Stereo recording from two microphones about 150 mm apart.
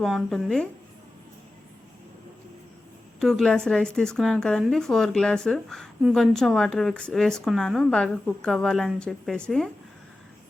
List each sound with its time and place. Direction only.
0.0 s a woman's voice: centre (ahead or behind)
3.2 s a woman's voice: centre (ahead or behind)